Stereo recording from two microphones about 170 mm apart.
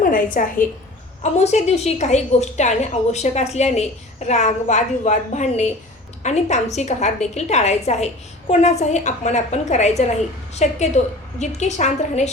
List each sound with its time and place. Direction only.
0.0 s a woman's voice: 55° left (ahead or behind)
1.2 s a woman's voice: 40° left (ahead or behind)